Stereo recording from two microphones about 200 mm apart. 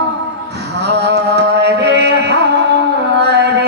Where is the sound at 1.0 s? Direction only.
55° right (ahead or behind).